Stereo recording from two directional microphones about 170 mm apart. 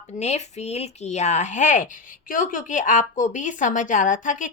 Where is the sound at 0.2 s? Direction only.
40° left (ahead or behind).